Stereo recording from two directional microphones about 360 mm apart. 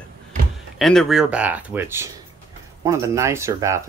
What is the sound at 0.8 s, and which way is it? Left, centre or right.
Speech, centre.